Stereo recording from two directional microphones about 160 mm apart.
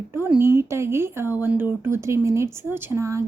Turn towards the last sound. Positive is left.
turn(degrees=-15)  # may be behind; listen again after turning